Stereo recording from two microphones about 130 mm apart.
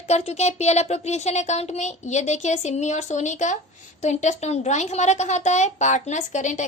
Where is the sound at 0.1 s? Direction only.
60° left (ahead or behind).